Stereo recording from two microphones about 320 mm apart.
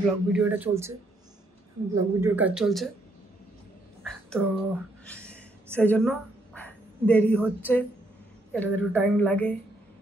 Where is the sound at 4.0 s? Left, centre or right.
Centre.